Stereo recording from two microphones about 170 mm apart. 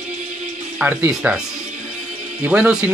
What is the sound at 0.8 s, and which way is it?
Speech, 10° right (ahead or behind).